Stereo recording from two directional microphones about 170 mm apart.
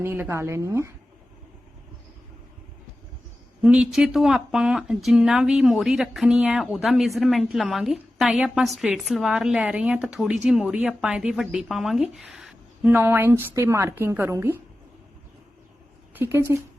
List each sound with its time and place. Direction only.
0.0 s a woman's voice: 15° right (ahead or behind)
3.6 s a woman's voice: 5° right (ahead or behind)
16.1 s speech: 15° right (ahead or behind)